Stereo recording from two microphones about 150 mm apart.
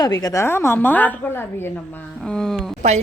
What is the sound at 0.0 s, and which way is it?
Speech, 25° left (ahead or behind).